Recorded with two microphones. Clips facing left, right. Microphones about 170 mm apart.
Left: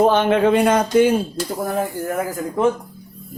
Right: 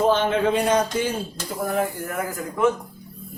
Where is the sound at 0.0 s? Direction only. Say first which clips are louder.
Left 5 dB; 60° left (ahead or behind).